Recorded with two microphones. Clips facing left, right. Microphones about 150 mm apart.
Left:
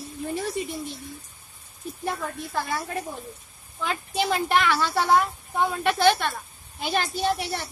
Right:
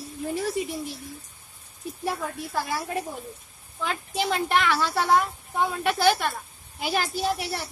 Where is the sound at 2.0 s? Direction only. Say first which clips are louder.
Even; 10° right (ahead or behind).